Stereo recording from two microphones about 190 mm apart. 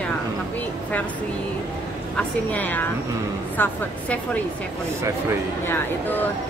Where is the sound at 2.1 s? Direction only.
10° left (ahead or behind).